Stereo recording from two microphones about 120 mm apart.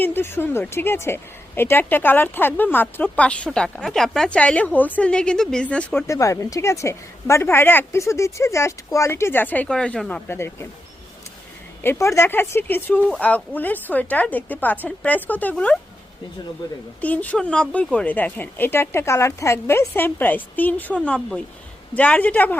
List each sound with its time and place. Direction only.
0.0 s speech: 20° left (ahead or behind)
6.1 s a woman's voice: 25° left (ahead or behind); by 10.2 s 10° left (ahead or behind)
10.2 s a woman's voice: 20° left (ahead or behind)
11.8 s speech: 20° left (ahead or behind)
17.0 s speech: 15° left (ahead or behind)